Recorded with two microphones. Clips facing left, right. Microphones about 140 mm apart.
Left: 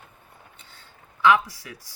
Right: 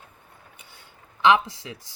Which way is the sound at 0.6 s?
15° right (ahead or behind).